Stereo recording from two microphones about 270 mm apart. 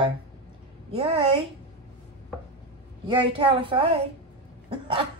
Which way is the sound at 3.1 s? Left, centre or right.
Centre.